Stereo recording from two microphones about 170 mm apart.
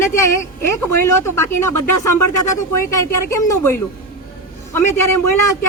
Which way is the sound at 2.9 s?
20° left (ahead or behind).